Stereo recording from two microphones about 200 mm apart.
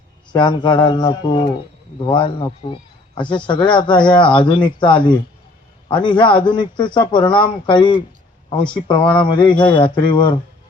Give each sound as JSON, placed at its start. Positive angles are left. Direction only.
{"t": 0.3, "sound": "speech", "side_deg": 20}